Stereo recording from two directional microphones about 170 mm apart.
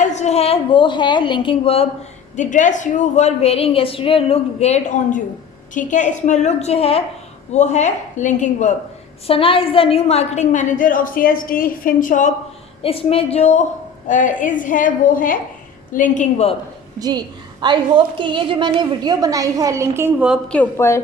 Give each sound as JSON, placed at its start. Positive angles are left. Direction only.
{"t": 0.0, "sound": "a woman's voice", "side_deg": 45}
{"t": 2.3, "sound": "a woman's voice", "side_deg": 45}
{"t": 9.2, "sound": "a woman's voice", "side_deg": 35}
{"t": 12.8, "sound": "a woman's voice", "side_deg": 35}
{"t": 17.0, "sound": "a woman's voice", "side_deg": -25}
{"t": 20.5, "sound": "speech", "side_deg": 10}